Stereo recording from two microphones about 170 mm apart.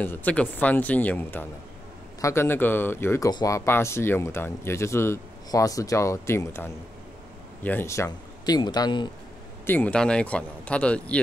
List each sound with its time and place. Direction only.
0.0 s speech: 10° left (ahead or behind)
9.7 s speech: 10° left (ahead or behind)